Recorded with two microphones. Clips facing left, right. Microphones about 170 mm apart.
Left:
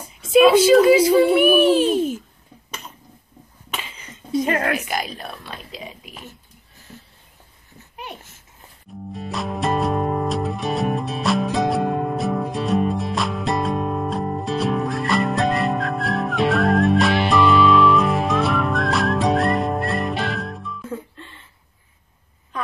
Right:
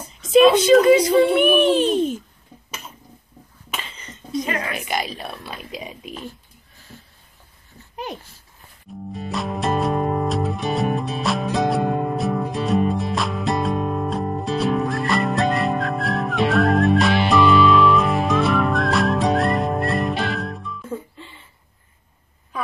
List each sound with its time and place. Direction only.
0.1 s a child's voice: 10° left (ahead or behind)
3.7 s a sound: 10° left (ahead or behind)
4.5 s a woman's voice: 50° left (ahead or behind)
4.7 s speech: centre (ahead or behind); by 6.2 s 20° right (ahead or behind)
9.1 s music: centre (ahead or behind)